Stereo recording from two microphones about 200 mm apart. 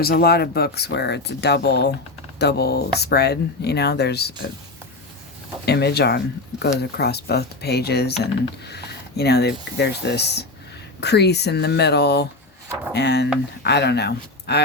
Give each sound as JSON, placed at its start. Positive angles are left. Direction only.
{"t": 0.0, "sound": "speech", "side_deg": 50}
{"t": 5.6, "sound": "speech", "side_deg": 55}